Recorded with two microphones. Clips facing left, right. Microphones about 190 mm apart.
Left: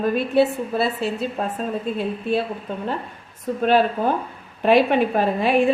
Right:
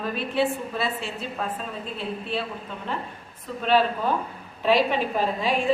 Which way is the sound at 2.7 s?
45° left (ahead or behind).